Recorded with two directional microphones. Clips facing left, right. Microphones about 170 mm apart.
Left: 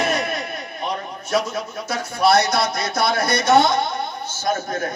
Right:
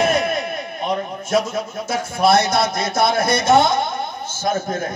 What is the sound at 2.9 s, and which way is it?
Speech, 50° right (ahead or behind).